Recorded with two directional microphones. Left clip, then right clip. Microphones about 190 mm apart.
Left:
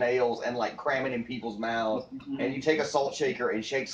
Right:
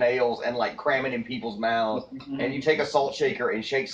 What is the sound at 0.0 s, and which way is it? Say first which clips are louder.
Speech: right 3 dB; centre (ahead or behind).